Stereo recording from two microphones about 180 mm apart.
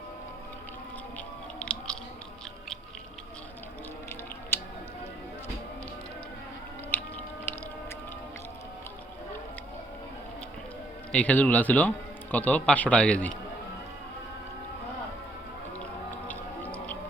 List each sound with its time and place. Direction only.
1.5 s chewing: 5° left (ahead or behind)
6.9 s music: 10° left (ahead or behind)
11.1 s a man's voice: 5° left (ahead or behind)
15.8 s music: 10° left (ahead or behind)